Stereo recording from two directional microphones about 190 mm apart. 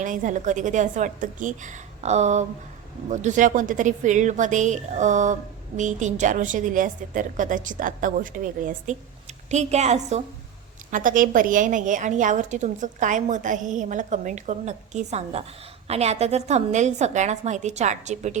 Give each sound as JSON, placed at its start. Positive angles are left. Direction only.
{"t": 0.0, "sound": "a woman's voice", "side_deg": -40}